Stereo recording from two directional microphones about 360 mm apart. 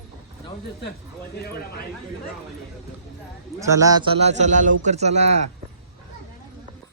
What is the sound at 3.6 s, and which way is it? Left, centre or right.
A man's voice, centre.